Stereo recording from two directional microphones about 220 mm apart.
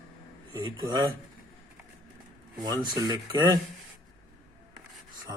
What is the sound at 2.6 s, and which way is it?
Speech, 20° right (ahead or behind).